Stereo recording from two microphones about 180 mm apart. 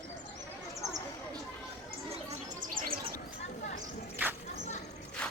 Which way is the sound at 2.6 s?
50° right (ahead or behind).